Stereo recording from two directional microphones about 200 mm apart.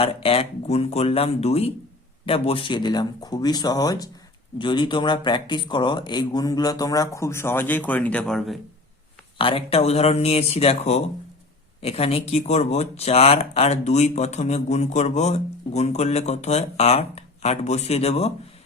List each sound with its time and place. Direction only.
0.0 s speech: 30° left (ahead or behind); by 8.5 s centre (ahead or behind)
9.4 s speech: 30° left (ahead or behind)